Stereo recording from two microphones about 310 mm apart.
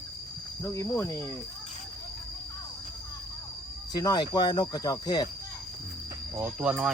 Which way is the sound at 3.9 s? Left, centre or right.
Centre.